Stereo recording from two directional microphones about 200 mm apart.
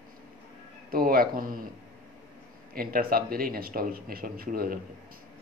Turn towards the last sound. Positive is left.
turn(degrees=-50)  # may be behind; listen again after turning